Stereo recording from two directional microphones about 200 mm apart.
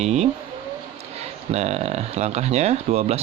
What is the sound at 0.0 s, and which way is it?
Speech, 35° right (ahead or behind).